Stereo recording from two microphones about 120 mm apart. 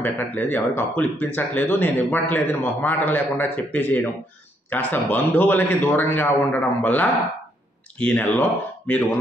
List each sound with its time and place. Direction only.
0.0 s speech: 15° left (ahead or behind)